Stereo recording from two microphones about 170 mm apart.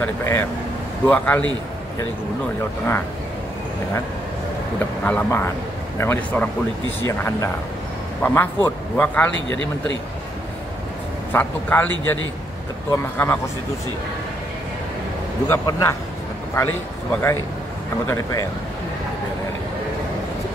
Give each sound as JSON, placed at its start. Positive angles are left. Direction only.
{"t": 0.0, "sound": "a man's voice", "side_deg": 15}
{"t": 5.0, "sound": "a man's voice", "side_deg": 10}
{"t": 11.3, "sound": "a man's voice", "side_deg": 10}
{"t": 12.9, "sound": "a man's voice", "side_deg": 15}
{"t": 15.4, "sound": "a man's voice", "side_deg": 15}